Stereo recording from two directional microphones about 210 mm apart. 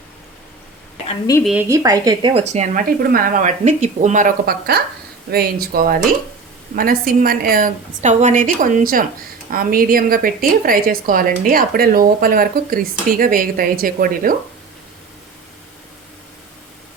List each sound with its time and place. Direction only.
1.5 s a woman's voice: 10° right (ahead or behind); by 14.3 s 40° right (ahead or behind)